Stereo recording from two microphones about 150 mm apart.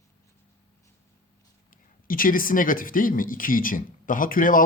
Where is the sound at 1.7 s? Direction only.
70° left (ahead or behind).